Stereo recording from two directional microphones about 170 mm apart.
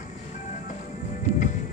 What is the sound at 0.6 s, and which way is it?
Music, 50° left (ahead or behind).